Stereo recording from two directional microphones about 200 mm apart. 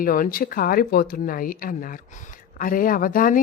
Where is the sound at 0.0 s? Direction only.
45° left (ahead or behind).